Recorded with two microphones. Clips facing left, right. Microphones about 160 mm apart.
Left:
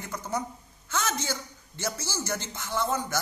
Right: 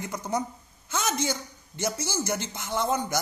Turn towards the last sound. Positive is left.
turn(degrees=-15)  # may be behind; listen again after turning